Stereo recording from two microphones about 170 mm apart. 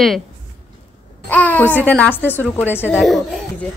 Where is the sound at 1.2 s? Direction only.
10° left (ahead or behind).